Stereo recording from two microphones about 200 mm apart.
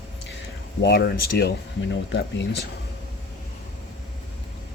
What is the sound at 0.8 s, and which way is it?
Speech, 55° left (ahead or behind).